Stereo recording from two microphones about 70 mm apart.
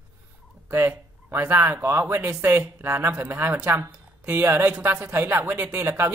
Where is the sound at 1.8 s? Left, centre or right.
Right.